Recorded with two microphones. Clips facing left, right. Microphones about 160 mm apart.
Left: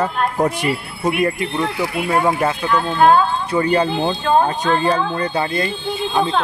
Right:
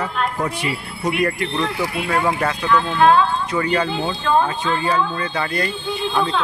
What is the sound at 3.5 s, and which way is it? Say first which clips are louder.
Speech: left 3 dB; 30° left (ahead or behind).